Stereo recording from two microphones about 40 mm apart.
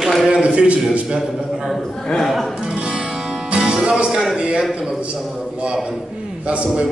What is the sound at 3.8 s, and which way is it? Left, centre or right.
Music, right.